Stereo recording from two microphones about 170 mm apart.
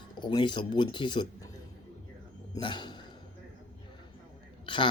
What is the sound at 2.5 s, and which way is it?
Speech, 25° left (ahead or behind).